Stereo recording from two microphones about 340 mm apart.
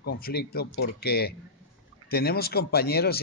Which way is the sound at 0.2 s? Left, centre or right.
Left.